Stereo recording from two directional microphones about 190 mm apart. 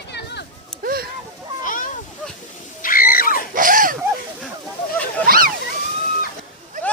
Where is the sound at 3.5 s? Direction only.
45° right (ahead or behind).